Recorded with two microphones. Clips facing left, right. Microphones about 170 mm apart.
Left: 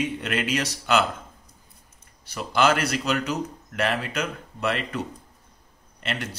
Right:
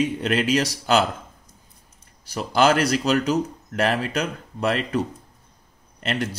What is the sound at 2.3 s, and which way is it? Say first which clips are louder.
Speech: right 3 dB; 40° right (ahead or behind).